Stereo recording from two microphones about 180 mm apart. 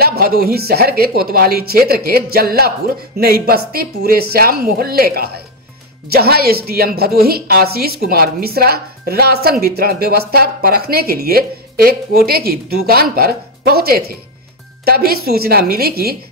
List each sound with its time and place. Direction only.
0.0 s a woman's voice: 60° right (ahead or behind)